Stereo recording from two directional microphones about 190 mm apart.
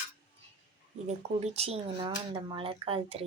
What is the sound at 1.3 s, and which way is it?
Speech, 30° right (ahead or behind).